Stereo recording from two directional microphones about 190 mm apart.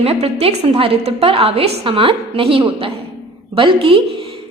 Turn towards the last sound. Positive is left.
turn(degrees=-30)  # may be behind; listen again after turning